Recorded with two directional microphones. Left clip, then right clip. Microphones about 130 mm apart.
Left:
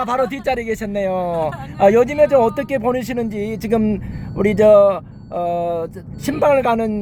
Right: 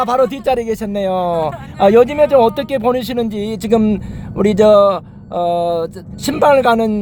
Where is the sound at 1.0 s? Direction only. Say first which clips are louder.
Right 3 dB; 20° right (ahead or behind).